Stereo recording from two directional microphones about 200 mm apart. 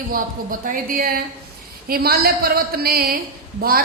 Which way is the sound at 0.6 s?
45° right (ahead or behind).